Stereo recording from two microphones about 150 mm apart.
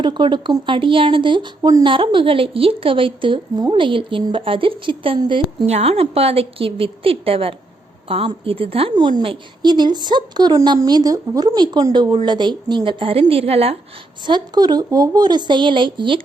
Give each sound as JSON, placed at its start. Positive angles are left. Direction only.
{"t": 0.0, "sound": "speech", "side_deg": -30}
{"t": 5.7, "sound": "a woman's voice", "side_deg": -45}
{"t": 14.3, "sound": "a woman's voice", "side_deg": -30}